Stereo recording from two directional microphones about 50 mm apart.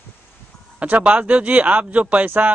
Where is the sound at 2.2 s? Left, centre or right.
Right.